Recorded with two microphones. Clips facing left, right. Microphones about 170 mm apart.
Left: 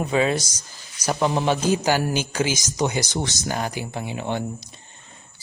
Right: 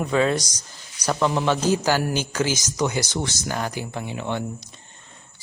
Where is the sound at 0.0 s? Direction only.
15° left (ahead or behind).